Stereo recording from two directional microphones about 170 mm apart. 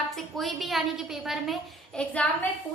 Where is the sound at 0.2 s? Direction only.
Centre (ahead or behind).